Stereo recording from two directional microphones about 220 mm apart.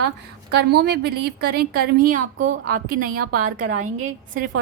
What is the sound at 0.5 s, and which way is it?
A woman's voice, 50° right (ahead or behind).